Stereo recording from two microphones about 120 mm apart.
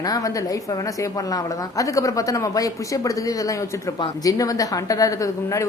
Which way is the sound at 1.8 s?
30° left (ahead or behind).